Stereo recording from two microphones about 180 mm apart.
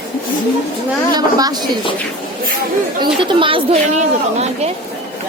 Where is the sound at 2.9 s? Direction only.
25° right (ahead or behind).